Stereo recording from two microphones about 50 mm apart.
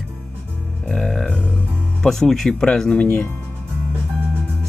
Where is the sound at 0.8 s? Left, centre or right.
Centre.